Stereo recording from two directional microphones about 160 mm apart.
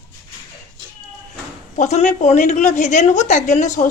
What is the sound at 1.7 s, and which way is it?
A woman's voice, 50° left (ahead or behind).